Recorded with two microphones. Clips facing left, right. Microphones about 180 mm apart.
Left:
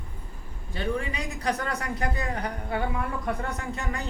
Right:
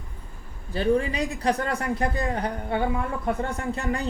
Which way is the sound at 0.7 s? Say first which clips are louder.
Right 7 dB; 35° right (ahead or behind).